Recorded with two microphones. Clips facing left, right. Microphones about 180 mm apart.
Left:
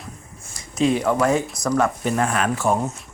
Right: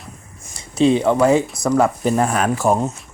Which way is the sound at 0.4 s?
25° right (ahead or behind).